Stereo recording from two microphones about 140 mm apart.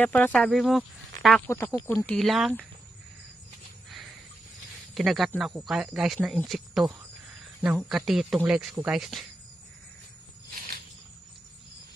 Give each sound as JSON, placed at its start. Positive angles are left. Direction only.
{"t": 0.0, "sound": "speech", "side_deg": 10}
{"t": 0.4, "sound": "speech", "side_deg": 0}
{"t": 1.5, "sound": "speech", "side_deg": 20}
{"t": 2.1, "sound": "speech", "side_deg": 0}
{"t": 4.9, "sound": "speech", "side_deg": 0}